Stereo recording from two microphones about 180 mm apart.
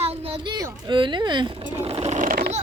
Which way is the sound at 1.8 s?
35° right (ahead or behind).